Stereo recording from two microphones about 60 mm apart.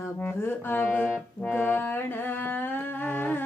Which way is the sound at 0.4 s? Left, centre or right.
Left.